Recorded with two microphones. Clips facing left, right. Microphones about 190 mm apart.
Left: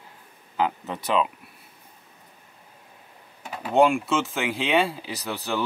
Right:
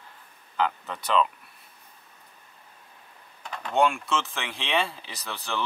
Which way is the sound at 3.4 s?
10° left (ahead or behind).